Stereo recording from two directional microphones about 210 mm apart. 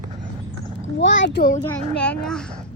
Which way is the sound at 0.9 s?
60° left (ahead or behind).